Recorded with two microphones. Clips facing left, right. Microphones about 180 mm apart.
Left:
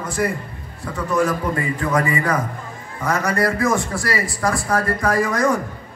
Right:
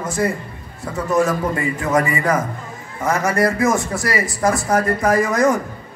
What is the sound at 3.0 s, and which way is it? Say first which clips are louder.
A man's voice: right 2 dB; 25° right (ahead or behind).